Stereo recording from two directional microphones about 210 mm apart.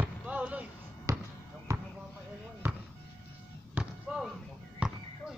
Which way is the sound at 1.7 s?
15° right (ahead or behind).